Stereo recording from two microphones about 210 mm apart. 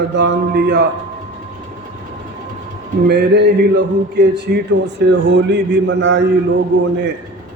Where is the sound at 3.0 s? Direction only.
50° right (ahead or behind).